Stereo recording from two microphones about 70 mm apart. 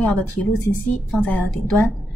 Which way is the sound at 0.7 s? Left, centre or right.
Centre.